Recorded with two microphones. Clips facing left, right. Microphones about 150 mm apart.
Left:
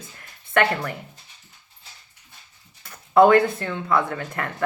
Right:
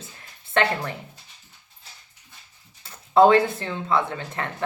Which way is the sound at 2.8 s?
25° right (ahead or behind).